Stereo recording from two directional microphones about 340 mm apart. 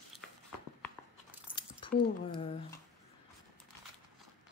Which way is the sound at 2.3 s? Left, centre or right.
Centre.